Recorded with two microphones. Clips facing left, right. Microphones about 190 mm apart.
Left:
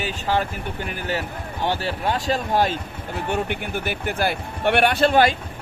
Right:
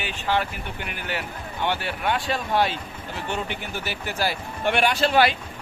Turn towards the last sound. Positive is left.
turn(degrees=45)  # may be behind; listen again after turning